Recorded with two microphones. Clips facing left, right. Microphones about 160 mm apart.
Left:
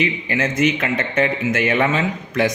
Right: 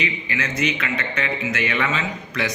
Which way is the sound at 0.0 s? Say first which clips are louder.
Left 6 dB; 50° left (ahead or behind).